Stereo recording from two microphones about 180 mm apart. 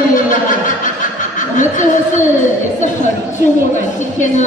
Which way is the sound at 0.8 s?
45° left (ahead or behind).